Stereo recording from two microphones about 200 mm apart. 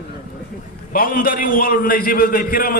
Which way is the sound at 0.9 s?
45° left (ahead or behind).